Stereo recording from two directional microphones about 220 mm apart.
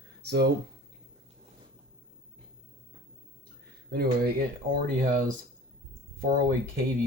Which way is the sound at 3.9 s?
45° right (ahead or behind).